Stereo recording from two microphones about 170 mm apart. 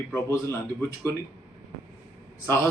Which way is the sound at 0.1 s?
15° left (ahead or behind).